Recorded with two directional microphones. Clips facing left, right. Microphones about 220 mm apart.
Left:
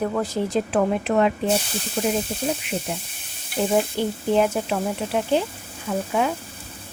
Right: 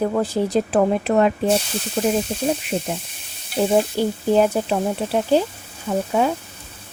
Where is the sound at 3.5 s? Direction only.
35° right (ahead or behind).